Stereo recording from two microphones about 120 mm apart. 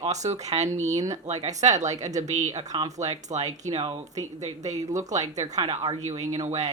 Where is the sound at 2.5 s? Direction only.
30° right (ahead or behind).